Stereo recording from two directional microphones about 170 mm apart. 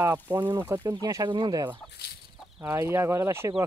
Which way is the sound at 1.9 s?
70° left (ahead or behind).